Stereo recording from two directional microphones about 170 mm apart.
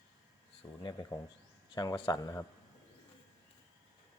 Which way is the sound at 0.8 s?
25° left (ahead or behind).